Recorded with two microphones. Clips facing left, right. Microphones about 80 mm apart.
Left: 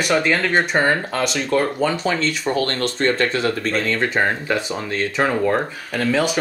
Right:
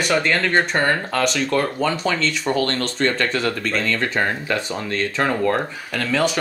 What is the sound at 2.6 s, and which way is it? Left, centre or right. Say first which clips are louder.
Speech: left 1 dB; left.